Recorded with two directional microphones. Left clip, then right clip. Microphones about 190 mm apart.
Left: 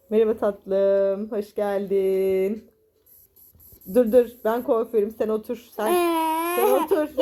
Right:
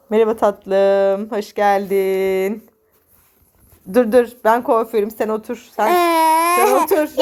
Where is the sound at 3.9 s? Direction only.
25° right (ahead or behind).